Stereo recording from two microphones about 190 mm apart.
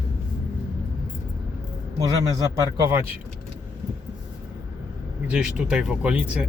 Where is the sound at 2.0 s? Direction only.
20° right (ahead or behind).